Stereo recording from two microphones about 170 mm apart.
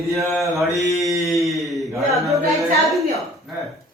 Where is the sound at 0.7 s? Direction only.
20° left (ahead or behind).